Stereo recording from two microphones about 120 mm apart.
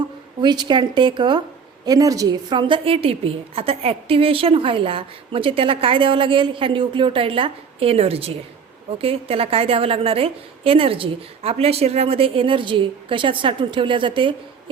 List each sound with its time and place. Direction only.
0.4 s a woman's voice: 40° right (ahead or behind)